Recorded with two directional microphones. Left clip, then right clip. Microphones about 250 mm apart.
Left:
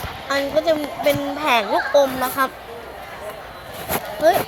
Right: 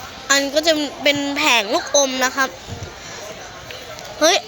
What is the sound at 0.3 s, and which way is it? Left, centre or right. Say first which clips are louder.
A woman's voice: right 2 dB; right.